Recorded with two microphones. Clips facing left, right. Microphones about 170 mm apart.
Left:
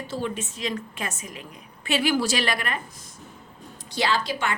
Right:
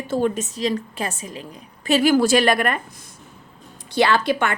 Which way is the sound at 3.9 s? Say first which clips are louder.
Right 7 dB; 60° right (ahead or behind).